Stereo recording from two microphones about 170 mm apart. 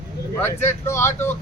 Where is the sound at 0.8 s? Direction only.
15° left (ahead or behind).